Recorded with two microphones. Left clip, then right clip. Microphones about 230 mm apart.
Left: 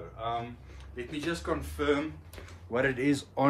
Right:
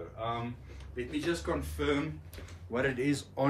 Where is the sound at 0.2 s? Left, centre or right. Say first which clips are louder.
Left 2 dB; centre.